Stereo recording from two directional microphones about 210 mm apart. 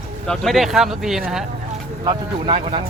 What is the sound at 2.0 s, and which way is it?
Speech, 25° right (ahead or behind).